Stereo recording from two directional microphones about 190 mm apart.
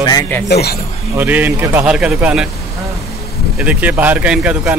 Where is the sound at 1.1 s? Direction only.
10° right (ahead or behind).